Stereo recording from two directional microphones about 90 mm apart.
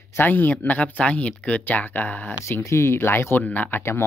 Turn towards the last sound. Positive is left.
turn(degrees=25)  # may be behind; listen again after turning